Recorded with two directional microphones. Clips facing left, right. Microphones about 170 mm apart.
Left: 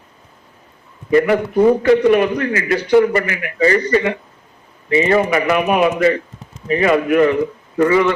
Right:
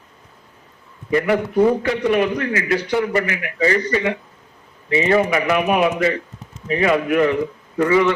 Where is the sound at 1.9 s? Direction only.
55° left (ahead or behind).